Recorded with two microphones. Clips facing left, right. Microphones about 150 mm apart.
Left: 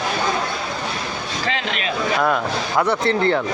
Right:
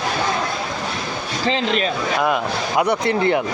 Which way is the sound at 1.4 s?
35° right (ahead or behind).